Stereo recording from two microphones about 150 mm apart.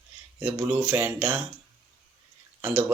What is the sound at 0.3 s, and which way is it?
Speech, 10° right (ahead or behind).